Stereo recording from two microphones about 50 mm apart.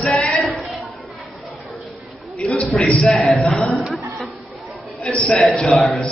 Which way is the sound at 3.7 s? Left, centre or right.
Centre.